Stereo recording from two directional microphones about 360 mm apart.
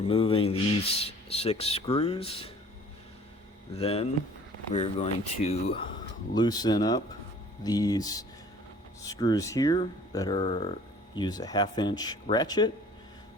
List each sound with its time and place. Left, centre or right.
0.0 s speech: centre
3.8 s speech: centre